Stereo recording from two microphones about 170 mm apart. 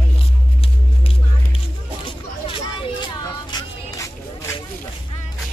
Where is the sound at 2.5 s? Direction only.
30° left (ahead or behind).